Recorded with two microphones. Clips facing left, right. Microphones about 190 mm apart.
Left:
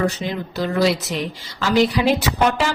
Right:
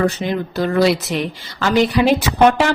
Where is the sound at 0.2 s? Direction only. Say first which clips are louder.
Right 4 dB; 55° right (ahead or behind).